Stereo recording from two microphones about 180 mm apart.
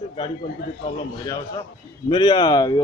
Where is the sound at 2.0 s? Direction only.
25° left (ahead or behind).